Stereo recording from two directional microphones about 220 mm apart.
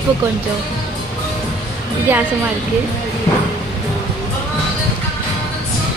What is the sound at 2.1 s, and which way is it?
Speech, 10° right (ahead or behind).